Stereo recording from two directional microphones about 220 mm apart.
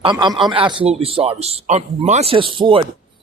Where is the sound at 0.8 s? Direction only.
25° right (ahead or behind).